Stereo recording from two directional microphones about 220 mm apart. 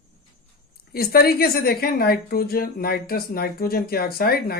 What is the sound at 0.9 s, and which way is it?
A woman's voice, 45° left (ahead or behind).